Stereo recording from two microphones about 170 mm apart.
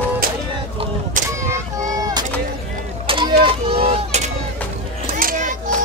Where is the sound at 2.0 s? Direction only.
20° right (ahead or behind).